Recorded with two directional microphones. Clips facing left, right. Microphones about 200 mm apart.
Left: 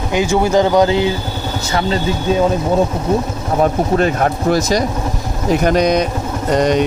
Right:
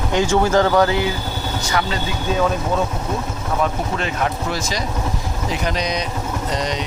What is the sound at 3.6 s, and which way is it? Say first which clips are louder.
Speech: left 8 dB; 45° left (ahead or behind).